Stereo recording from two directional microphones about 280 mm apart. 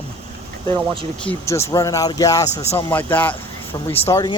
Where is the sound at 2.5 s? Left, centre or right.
Left.